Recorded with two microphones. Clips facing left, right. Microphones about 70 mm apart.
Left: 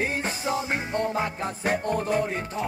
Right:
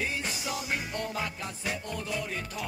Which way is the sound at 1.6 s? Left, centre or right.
Left.